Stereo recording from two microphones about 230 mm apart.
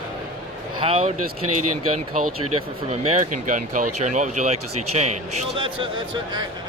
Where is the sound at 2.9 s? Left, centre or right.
Right.